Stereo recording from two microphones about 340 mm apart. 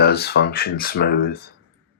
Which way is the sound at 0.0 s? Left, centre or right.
Left.